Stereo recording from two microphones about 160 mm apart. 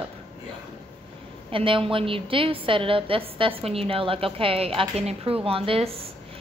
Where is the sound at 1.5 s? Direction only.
35° right (ahead or behind).